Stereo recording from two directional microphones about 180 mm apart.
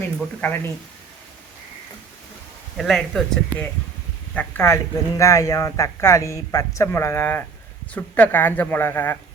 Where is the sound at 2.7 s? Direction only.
Centre (ahead or behind).